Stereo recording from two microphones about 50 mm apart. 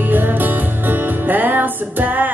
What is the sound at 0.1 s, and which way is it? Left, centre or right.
Music, right.